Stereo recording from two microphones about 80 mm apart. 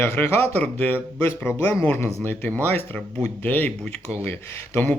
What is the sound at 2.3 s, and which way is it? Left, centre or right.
Speech, left.